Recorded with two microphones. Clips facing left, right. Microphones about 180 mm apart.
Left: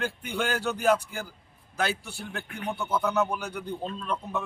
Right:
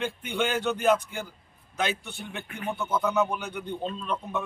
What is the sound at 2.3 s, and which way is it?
Speech, centre (ahead or behind).